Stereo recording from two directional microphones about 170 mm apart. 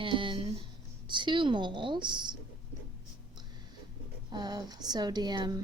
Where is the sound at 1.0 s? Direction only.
30° right (ahead or behind).